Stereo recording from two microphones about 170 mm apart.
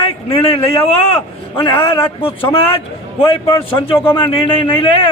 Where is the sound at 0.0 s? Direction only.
30° left (ahead or behind).